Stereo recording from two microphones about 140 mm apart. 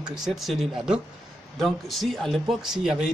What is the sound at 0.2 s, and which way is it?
A man's voice, centre (ahead or behind).